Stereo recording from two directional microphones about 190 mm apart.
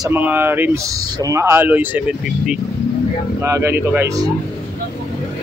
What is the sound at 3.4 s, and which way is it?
Speech, 15° right (ahead or behind).